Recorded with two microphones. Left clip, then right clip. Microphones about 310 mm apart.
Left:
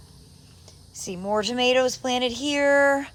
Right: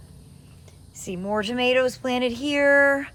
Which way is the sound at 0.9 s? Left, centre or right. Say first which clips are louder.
Left 1 dB; centre.